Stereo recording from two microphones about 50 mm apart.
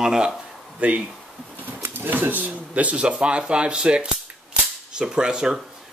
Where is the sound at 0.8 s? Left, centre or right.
Right.